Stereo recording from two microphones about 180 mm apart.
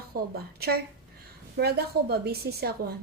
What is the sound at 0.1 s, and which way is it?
A woman's voice, 60° right (ahead or behind).